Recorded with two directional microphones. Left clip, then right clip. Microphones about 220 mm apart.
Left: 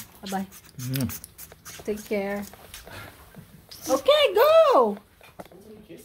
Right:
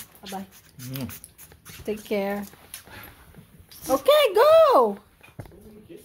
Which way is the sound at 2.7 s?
5° right (ahead or behind).